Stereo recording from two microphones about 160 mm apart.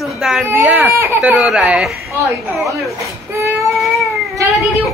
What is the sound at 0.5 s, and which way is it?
Speech, 15° right (ahead or behind).